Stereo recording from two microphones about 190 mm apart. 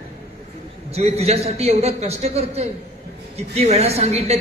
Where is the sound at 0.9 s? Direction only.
35° right (ahead or behind).